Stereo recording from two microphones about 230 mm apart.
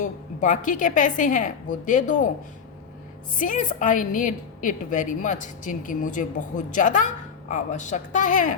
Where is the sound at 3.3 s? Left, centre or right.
Left.